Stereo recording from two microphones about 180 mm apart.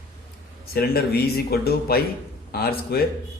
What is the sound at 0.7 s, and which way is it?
A man's voice, 60° left (ahead or behind).